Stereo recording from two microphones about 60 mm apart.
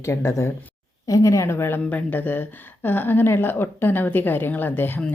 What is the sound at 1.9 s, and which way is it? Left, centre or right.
Speech, left.